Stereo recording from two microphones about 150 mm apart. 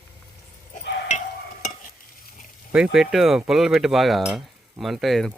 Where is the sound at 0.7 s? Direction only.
55° left (ahead or behind).